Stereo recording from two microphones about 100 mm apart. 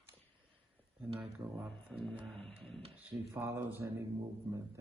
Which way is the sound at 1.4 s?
45° right (ahead or behind).